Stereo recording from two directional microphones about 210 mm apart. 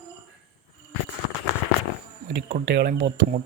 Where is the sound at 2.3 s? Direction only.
50° right (ahead or behind).